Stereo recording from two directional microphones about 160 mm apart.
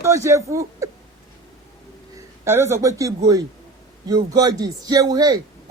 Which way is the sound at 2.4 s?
15° right (ahead or behind).